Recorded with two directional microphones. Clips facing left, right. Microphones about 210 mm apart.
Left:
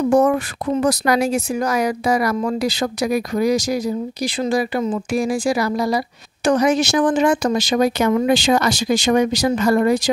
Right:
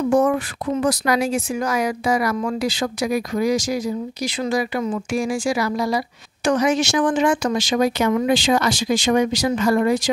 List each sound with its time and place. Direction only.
0.1 s speech: 40° left (ahead or behind)